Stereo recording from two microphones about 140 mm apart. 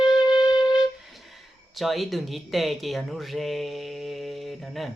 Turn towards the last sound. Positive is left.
turn(degrees=0)  # may be behind; listen again after turning